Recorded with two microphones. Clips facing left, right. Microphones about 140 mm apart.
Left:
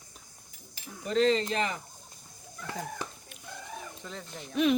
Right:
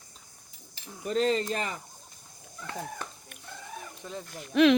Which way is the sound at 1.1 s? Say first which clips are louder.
Left 1 dB; 45° right (ahead or behind).